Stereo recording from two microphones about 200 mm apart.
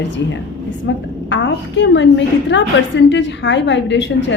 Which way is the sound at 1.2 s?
65° left (ahead or behind).